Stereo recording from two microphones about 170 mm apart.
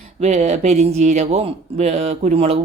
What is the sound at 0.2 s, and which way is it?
Speech, 40° right (ahead or behind).